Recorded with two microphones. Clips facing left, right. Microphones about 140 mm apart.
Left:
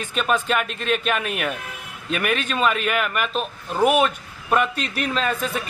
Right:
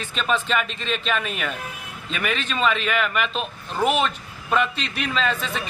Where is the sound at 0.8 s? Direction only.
55° left (ahead or behind).